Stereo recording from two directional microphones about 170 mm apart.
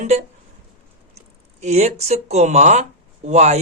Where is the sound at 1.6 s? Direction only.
40° right (ahead or behind).